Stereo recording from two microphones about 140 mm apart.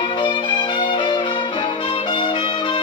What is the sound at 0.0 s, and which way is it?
Music, 35° left (ahead or behind).